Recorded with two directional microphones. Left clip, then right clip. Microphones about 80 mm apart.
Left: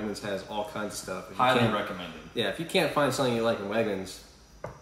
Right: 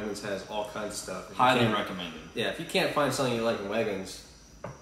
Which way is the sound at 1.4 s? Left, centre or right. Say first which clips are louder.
Right 1 dB; centre.